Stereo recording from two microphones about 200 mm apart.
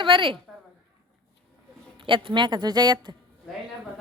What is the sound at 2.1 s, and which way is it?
Speech, 25° right (ahead or behind).